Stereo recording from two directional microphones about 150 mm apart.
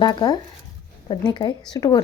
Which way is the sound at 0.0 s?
30° left (ahead or behind).